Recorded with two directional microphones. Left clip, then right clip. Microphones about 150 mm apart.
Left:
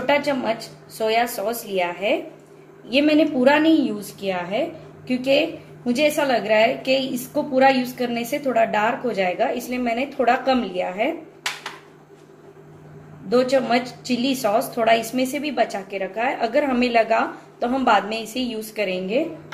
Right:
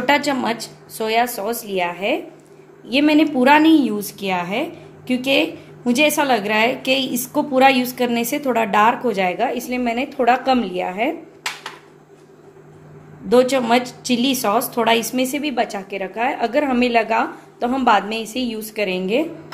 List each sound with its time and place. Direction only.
0.0 s a woman's voice: 85° right
13.3 s a woman's voice: 65° right (ahead or behind)